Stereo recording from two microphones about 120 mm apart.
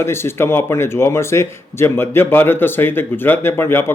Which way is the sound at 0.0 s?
20° left (ahead or behind).